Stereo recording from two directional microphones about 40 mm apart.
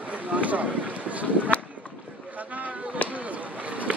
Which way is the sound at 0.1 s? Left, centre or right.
Right.